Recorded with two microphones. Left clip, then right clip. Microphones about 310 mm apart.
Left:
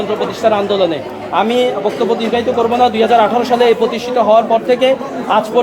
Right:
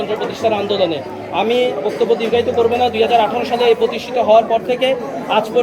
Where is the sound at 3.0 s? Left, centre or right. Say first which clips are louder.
Left 3 dB; centre.